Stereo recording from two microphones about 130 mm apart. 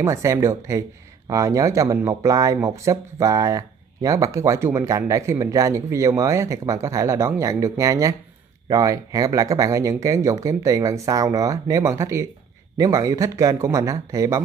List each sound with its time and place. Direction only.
0.0 s speech: 25° right (ahead or behind)